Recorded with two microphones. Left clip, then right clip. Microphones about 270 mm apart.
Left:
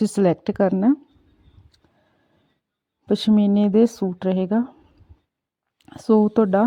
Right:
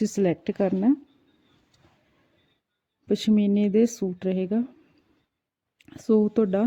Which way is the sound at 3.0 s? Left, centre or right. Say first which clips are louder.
Left 4 dB; left.